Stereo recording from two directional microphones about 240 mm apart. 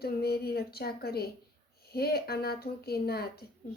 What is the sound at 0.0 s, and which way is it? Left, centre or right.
A woman's voice, left.